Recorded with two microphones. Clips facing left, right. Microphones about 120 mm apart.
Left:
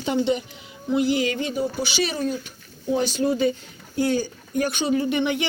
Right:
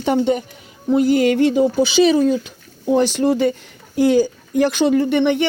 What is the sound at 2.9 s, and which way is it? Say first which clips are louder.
Speech: right 6 dB; 70° right (ahead or behind).